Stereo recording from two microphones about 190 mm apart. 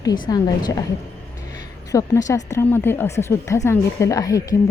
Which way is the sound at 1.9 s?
20° left (ahead or behind).